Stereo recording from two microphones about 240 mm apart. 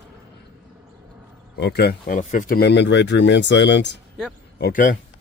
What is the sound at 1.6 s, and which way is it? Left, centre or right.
Speech, left.